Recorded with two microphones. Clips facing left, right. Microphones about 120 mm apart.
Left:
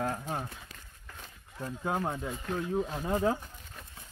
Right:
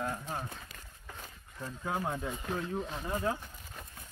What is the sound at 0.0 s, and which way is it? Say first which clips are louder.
Run: left 3 dB; 40° left (ahead or behind).